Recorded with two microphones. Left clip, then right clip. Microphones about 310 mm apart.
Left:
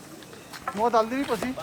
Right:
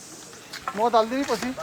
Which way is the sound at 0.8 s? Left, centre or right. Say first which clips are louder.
Right 2 dB; right.